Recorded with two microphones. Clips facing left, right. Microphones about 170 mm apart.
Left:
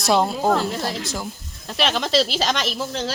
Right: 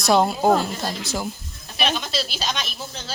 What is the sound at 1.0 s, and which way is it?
Speech, 5° right (ahead or behind).